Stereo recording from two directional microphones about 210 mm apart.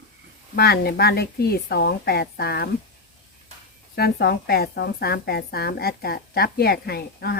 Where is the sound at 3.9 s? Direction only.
50° left (ahead or behind).